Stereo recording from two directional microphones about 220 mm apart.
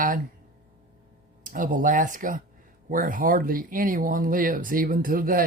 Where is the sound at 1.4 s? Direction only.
35° right (ahead or behind).